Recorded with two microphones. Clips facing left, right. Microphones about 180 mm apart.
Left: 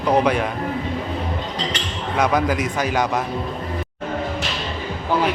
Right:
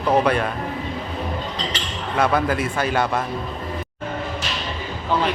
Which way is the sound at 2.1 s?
15° left (ahead or behind).